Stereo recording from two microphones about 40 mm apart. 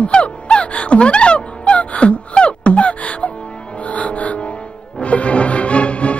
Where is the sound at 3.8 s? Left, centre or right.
Left.